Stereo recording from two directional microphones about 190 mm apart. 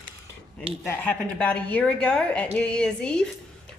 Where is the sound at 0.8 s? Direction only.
10° left (ahead or behind).